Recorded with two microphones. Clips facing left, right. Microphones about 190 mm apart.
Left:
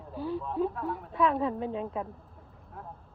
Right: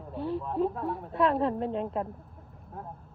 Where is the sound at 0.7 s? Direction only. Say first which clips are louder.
Right 2 dB; 30° right (ahead or behind).